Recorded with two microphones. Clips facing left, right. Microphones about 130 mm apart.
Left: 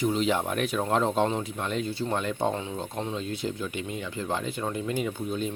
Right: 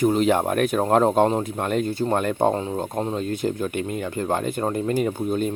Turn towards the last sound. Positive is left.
turn(degrees=-50)  # may be behind; listen again after turning